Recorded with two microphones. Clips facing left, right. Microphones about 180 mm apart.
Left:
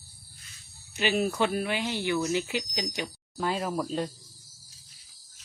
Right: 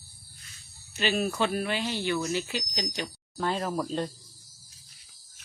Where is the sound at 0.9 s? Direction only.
15° left (ahead or behind).